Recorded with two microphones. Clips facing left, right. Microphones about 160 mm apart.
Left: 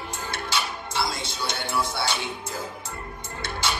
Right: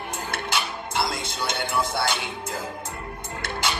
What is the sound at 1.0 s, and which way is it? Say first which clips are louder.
Music: right 2 dB; 55° right (ahead or behind).